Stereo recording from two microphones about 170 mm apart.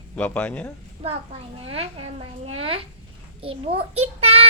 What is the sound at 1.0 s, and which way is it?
A child's voice, 35° right (ahead or behind).